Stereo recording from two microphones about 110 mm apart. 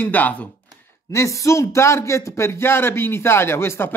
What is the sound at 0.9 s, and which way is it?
A man's voice, 25° left (ahead or behind).